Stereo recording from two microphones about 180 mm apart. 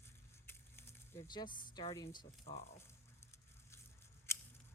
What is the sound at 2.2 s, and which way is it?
Speech, 35° left (ahead or behind).